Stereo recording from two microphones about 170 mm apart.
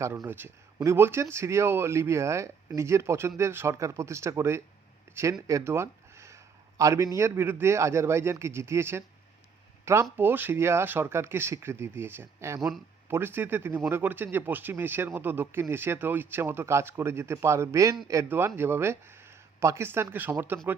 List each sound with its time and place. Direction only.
0.0 s speech: 15° right (ahead or behind)